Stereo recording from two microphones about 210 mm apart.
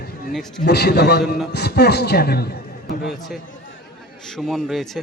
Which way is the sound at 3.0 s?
Centre (ahead or behind).